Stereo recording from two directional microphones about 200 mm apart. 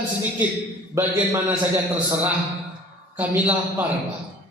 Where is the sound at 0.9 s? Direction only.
10° right (ahead or behind).